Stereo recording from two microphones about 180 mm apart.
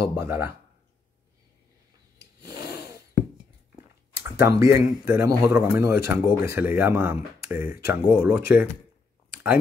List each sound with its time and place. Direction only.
0.1 s speech: 15° right (ahead or behind)
2.4 s filing: 20° right (ahead or behind)
4.2 s speech: 15° right (ahead or behind)